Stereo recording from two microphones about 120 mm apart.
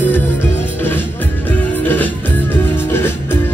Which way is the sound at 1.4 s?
15° left (ahead or behind).